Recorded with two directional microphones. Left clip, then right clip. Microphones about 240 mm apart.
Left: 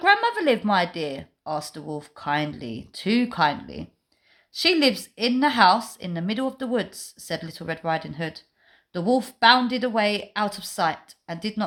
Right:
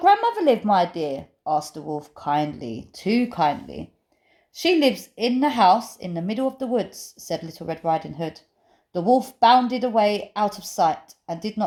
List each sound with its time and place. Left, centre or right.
0.0 s a woman's voice: left
1.5 s speech: left
2.2 s a woman's voice: left
6.9 s speech: left
7.5 s a woman's voice: left